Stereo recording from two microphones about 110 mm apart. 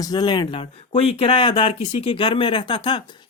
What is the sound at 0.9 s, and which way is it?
Speech, 60° left (ahead or behind).